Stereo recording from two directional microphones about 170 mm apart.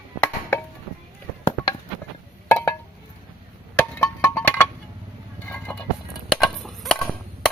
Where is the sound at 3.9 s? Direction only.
10° left (ahead or behind).